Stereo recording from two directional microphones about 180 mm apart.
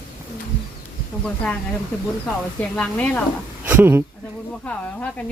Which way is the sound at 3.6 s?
10° right (ahead or behind).